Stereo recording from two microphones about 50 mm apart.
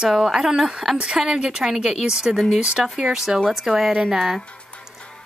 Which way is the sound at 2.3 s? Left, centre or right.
Centre.